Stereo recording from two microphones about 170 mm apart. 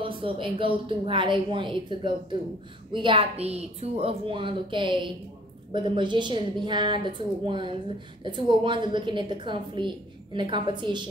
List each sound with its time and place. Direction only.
0.0 s a woman's voice: 30° right (ahead or behind)